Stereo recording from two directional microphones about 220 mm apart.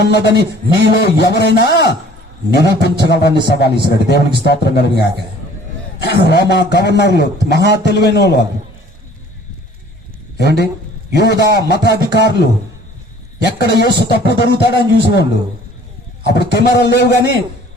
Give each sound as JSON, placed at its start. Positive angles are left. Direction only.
{"t": 0.0, "sound": "speech", "side_deg": 50}
{"t": 10.3, "sound": "a man's voice", "side_deg": 50}
{"t": 13.4, "sound": "speech", "side_deg": 50}
{"t": 16.2, "sound": "speech", "side_deg": 50}